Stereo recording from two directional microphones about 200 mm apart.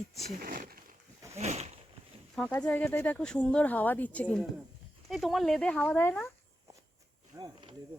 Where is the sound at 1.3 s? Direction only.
35° right (ahead or behind).